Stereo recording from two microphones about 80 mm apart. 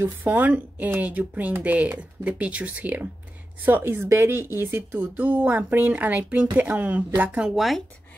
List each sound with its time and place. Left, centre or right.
0.0 s speech: right
7.5 s speech: centre